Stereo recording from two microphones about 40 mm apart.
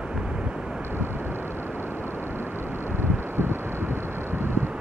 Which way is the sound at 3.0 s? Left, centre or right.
Right.